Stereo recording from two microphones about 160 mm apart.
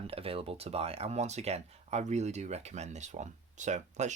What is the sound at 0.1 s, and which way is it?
Speech, 35° right (ahead or behind).